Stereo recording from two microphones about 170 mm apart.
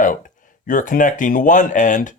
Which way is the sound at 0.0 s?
50° left (ahead or behind).